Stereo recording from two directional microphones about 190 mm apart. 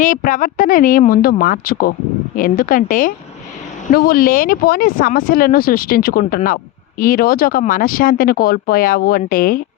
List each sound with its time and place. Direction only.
0.0 s speech: 45° left (ahead or behind)